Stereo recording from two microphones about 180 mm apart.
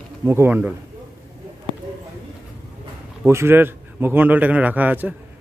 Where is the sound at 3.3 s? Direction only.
15° right (ahead or behind).